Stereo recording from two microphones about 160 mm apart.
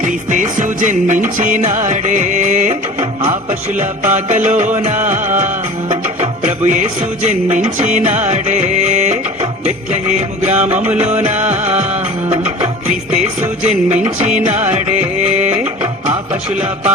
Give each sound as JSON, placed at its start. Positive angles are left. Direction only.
{"t": 0.0, "sound": "music", "side_deg": -55}
{"t": 12.9, "sound": "music", "side_deg": -45}
{"t": 14.3, "sound": "music", "side_deg": -45}